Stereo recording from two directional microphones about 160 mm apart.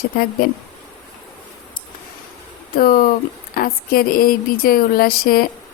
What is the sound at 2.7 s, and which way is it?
Speech, 65° left (ahead or behind).